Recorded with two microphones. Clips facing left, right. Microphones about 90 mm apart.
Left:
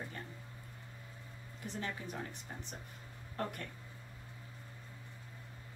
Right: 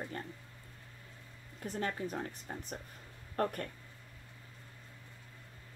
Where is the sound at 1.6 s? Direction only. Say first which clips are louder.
Right 5 dB; 45° right (ahead or behind).